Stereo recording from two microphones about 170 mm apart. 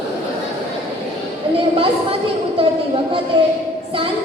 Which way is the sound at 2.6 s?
30° right (ahead or behind).